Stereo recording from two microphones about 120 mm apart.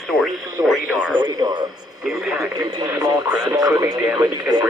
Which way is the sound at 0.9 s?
10° right (ahead or behind).